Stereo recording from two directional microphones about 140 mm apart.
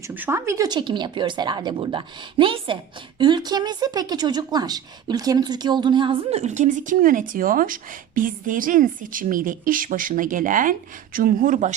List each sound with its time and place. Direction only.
0.1 s speech: 15° right (ahead or behind); by 11.7 s 65° right (ahead or behind)